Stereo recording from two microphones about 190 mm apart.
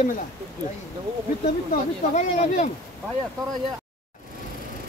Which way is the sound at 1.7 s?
40° left (ahead or behind).